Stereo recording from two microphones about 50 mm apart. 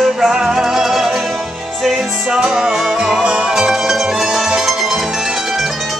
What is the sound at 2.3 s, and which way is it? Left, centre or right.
Music, centre.